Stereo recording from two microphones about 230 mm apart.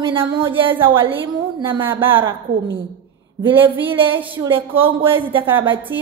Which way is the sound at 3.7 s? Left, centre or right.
Centre.